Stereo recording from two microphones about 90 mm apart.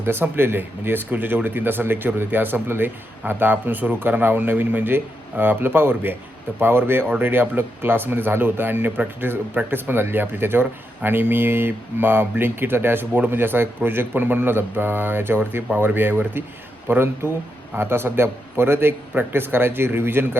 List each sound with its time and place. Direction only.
0.0 s speech: 25° right (ahead or behind)